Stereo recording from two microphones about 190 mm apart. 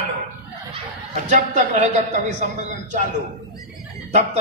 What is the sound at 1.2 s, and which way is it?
Speech, 40° right (ahead or behind).